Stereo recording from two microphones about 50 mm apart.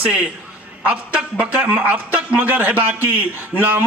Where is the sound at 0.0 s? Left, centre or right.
Right.